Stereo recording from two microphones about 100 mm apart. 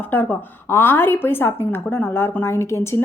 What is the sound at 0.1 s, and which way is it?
A woman's voice, 20° left (ahead or behind).